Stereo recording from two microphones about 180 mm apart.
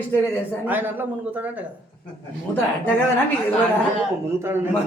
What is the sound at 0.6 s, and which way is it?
A man's voice, 10° right (ahead or behind).